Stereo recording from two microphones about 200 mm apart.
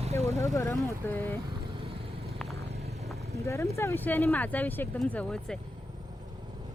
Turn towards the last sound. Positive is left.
turn(degrees=5)  # may be behind; listen again after turning